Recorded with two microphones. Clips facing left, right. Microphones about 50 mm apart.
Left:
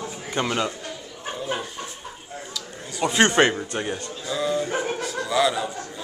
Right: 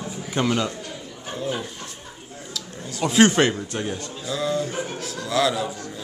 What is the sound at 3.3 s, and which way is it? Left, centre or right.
A man's voice, centre.